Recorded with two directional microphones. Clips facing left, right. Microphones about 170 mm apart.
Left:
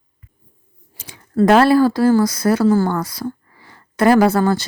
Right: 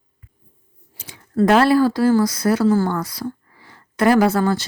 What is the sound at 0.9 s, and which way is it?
A woman's voice, 40° left (ahead or behind).